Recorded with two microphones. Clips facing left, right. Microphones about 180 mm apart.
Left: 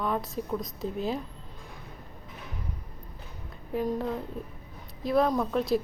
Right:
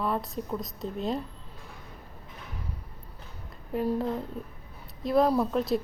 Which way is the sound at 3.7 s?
Centre (ahead or behind).